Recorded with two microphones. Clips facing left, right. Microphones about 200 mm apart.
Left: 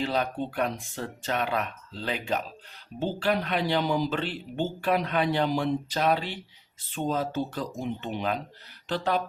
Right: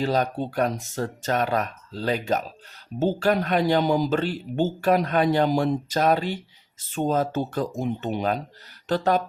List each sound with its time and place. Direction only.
0.0 s speech: 40° right (ahead or behind)